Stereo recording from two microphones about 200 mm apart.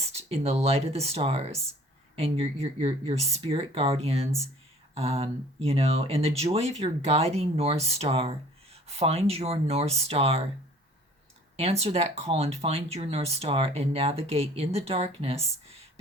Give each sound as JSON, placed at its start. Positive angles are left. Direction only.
{"t": 0.0, "sound": "speech", "side_deg": -30}
{"t": 11.5, "sound": "speech", "side_deg": -30}